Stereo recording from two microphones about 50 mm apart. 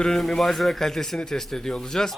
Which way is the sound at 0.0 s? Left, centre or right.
Centre.